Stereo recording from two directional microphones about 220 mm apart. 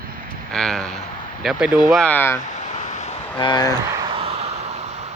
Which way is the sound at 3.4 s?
20° left (ahead or behind).